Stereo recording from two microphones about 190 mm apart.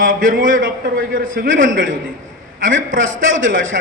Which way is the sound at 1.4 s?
90° right.